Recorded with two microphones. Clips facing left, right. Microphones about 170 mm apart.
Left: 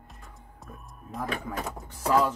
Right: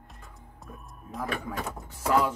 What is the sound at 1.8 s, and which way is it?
Speech, 5° right (ahead or behind).